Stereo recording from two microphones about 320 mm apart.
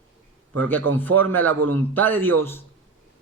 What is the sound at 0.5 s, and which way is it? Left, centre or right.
A man's voice, centre.